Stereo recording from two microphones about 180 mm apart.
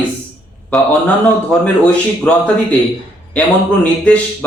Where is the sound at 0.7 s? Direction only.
5° left (ahead or behind).